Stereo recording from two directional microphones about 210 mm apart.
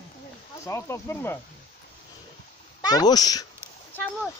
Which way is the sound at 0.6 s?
15° left (ahead or behind).